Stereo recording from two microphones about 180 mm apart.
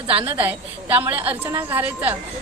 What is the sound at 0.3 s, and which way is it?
A woman's voice, 10° right (ahead or behind).